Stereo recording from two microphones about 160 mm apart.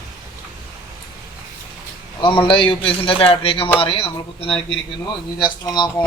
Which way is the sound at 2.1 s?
30° left (ahead or behind).